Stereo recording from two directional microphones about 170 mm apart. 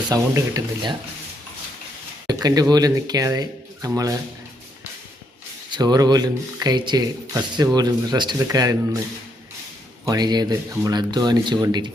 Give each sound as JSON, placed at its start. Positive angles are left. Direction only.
{"t": 0.1, "sound": "speech", "side_deg": -20}
{"t": 2.2, "sound": "speech", "side_deg": -20}
{"t": 5.7, "sound": "speech", "side_deg": -25}
{"t": 10.1, "sound": "speech", "side_deg": -25}